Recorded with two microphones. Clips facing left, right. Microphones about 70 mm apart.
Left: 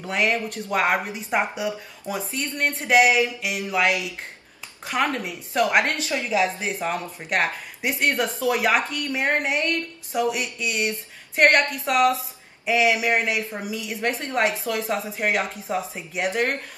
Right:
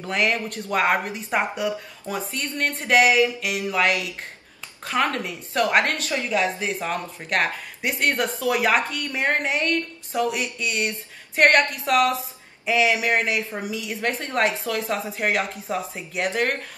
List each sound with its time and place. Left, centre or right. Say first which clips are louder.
0.0 s speech: even; centre
4.8 s speech: right 1 dB; centre